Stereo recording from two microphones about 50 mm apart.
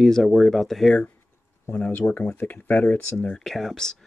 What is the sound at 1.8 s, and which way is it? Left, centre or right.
Speech, left.